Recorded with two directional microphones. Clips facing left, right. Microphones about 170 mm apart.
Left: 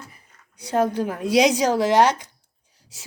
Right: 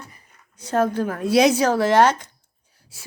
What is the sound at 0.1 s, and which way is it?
A woman's voice, 15° left (ahead or behind).